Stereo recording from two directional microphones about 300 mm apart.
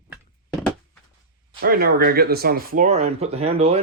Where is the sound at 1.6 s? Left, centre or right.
Right.